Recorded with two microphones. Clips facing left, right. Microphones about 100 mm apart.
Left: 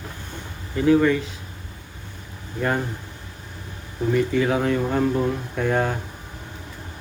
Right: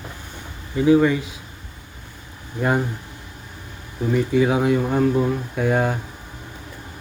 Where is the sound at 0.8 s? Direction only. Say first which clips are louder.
Right 2 dB; 15° right (ahead or behind).